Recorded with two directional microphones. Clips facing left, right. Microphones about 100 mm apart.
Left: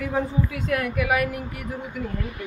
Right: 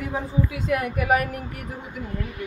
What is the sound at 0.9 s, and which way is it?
Speech, 35° right (ahead or behind).